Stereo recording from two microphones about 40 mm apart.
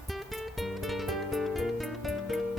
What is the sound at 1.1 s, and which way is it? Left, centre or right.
Music, centre.